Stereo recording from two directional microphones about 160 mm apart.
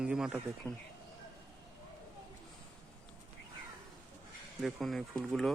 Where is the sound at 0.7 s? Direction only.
15° right (ahead or behind).